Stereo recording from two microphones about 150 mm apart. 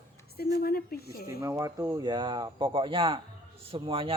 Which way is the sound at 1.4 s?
20° right (ahead or behind).